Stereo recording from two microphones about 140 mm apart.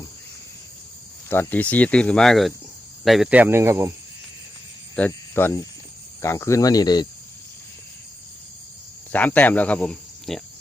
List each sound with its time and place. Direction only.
1.3 s speech: 15° left (ahead or behind); by 3.9 s 20° right (ahead or behind)
4.9 s speech: 15° left (ahead or behind); by 7.1 s 30° left (ahead or behind)
9.1 s speech: 10° left (ahead or behind)